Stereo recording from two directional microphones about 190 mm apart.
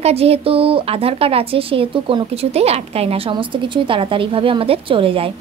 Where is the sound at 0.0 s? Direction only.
30° right (ahead or behind).